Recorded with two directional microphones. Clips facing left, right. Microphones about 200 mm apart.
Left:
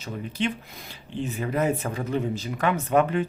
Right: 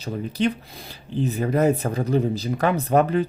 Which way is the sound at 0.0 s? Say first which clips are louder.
Right 5 dB; 40° right (ahead or behind).